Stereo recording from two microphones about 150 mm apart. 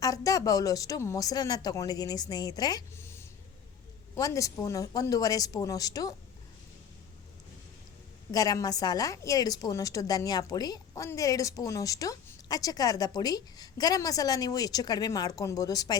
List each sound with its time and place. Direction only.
0.0 s a woman's voice: 25° left (ahead or behind)
4.1 s a woman's voice: 20° left (ahead or behind)
8.3 s a woman's voice: 25° left (ahead or behind)